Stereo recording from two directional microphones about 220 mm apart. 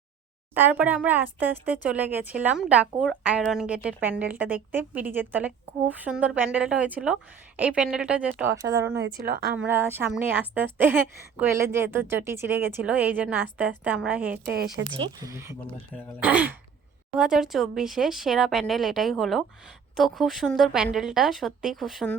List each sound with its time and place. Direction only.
0.5 s speech: 10° right (ahead or behind)
9.0 s a woman's voice: 45° right (ahead or behind)
9.6 s speech: 10° right (ahead or behind)
14.3 s a woman's voice: 45° right (ahead or behind)
14.9 s speech: 15° right (ahead or behind)